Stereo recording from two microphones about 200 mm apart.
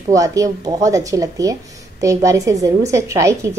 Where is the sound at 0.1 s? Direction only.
15° right (ahead or behind).